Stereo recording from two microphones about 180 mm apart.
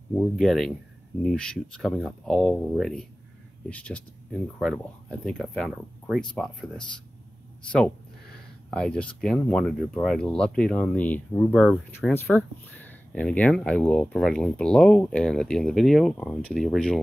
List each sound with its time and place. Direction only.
0.1 s speech: centre (ahead or behind)
8.6 s speech: 5° left (ahead or behind)